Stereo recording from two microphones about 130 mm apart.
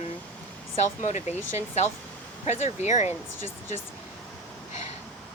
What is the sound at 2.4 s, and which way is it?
Speech, 60° left (ahead or behind).